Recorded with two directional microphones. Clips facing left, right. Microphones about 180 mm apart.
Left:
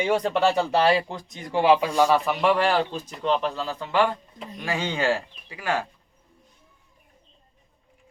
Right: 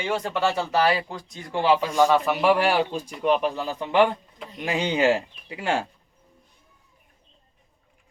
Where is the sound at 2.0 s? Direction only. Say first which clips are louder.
Right 1 dB; centre (ahead or behind); by 5.8 s 25° right (ahead or behind).